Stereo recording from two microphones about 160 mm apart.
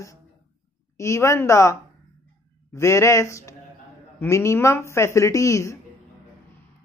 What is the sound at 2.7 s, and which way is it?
Speech, 20° left (ahead or behind).